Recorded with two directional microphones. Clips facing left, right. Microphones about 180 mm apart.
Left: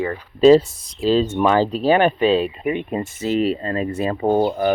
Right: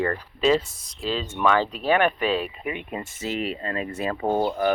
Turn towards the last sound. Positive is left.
turn(degrees=25)  # may be behind; listen again after turning